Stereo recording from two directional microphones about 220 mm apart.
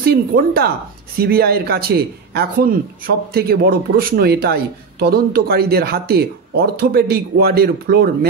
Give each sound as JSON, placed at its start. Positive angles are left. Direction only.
{"t": 0.0, "sound": "speech", "side_deg": -45}